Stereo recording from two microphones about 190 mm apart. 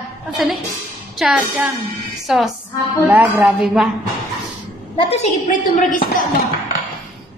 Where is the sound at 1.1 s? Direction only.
Centre (ahead or behind).